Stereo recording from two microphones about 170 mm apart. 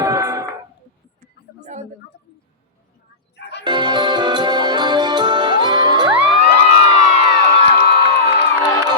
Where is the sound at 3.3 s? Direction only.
80° left.